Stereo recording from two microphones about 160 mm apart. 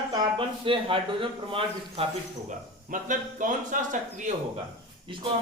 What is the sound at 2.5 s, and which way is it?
Speech, 50° right (ahead or behind).